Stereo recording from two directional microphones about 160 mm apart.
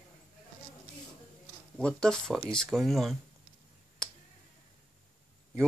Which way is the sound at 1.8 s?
5° left (ahead or behind).